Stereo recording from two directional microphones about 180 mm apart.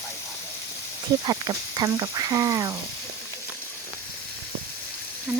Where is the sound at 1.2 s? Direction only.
25° right (ahead or behind).